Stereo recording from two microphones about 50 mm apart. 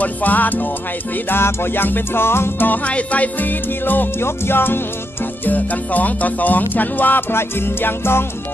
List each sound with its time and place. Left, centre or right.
0.0 s music: left
1.3 s music: left
2.7 s music: left
5.4 s music: left